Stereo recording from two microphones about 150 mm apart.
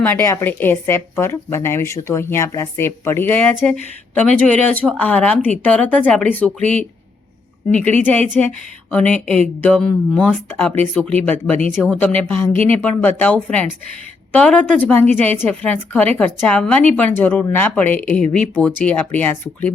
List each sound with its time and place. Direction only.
0.0 s a woman's voice: 15° left (ahead or behind)
7.7 s a woman's voice: 10° left (ahead or behind)